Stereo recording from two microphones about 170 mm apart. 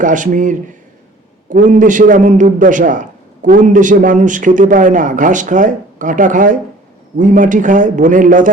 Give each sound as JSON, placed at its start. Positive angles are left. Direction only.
{"t": 0.0, "sound": "a man's voice", "side_deg": -50}